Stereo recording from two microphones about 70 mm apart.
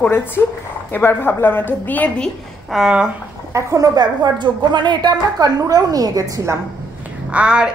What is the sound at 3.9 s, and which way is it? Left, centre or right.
A woman's voice, right.